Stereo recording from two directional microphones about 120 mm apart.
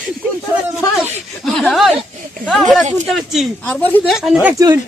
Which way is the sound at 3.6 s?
15° left (ahead or behind).